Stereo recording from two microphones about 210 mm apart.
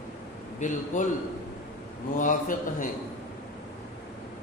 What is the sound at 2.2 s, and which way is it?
Speech, 40° left (ahead or behind).